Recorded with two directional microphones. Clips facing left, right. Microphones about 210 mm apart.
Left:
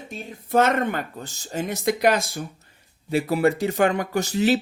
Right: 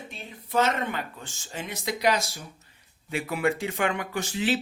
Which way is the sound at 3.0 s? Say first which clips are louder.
Left 6 dB; 35° left (ahead or behind).